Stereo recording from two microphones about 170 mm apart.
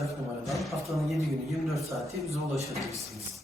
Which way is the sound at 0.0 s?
Centre (ahead or behind).